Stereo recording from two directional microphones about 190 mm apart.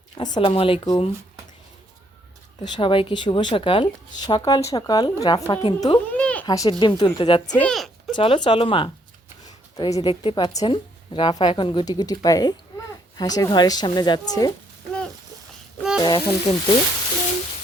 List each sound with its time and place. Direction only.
0.2 s speech: 20° left (ahead or behind)
2.6 s speech: 25° left (ahead or behind)
6.1 s a sound: 5° left (ahead or behind)
6.4 s speech: 20° left (ahead or behind)
7.6 s a sound: centre (ahead or behind)
8.1 s speech: 25° left (ahead or behind)
16.0 s speech: 20° left (ahead or behind)